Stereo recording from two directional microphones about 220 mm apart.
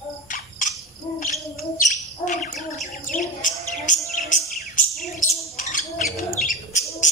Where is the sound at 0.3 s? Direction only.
35° left (ahead or behind).